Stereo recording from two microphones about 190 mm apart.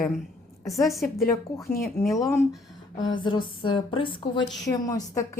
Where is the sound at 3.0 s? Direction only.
25° left (ahead or behind).